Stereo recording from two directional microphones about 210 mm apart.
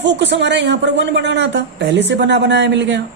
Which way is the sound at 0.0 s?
55° right (ahead or behind).